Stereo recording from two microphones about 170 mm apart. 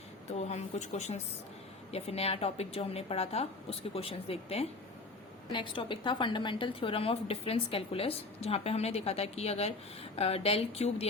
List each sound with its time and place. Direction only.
0.3 s a woman's voice: 40° left (ahead or behind)